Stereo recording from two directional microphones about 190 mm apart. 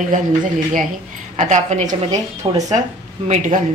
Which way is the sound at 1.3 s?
40° right (ahead or behind).